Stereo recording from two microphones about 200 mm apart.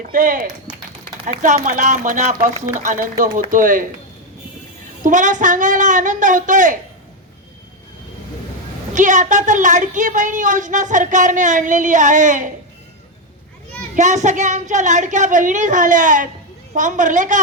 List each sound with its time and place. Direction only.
0.0 s a woman's voice: 40° right (ahead or behind)
5.0 s a woman's voice: 40° right (ahead or behind)
9.0 s a woman's voice: 40° right (ahead or behind)
13.9 s a woman's voice: 35° right (ahead or behind)